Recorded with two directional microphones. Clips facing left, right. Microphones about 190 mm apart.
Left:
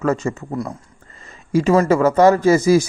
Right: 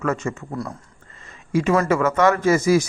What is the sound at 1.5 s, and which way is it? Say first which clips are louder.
A man's voice: left 4 dB; 35° left (ahead or behind).